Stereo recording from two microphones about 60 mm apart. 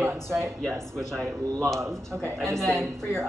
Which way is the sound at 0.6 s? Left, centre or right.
Centre.